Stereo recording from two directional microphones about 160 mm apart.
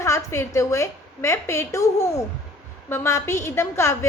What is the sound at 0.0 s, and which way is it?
A woman's voice, 15° left (ahead or behind).